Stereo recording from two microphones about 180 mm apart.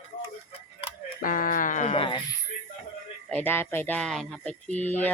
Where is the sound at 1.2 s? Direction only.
50° left (ahead or behind); by 2.2 s 30° left (ahead or behind).